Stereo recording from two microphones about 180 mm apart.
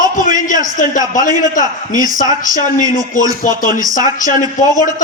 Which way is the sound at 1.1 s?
45° left (ahead or behind).